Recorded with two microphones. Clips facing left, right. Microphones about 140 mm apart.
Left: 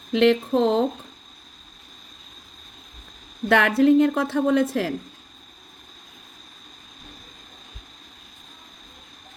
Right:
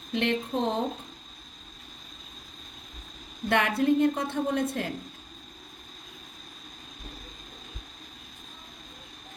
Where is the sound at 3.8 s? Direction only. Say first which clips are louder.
Left 8 dB; 90° left.